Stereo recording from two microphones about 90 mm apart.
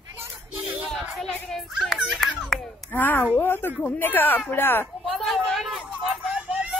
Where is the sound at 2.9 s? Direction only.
20° left (ahead or behind).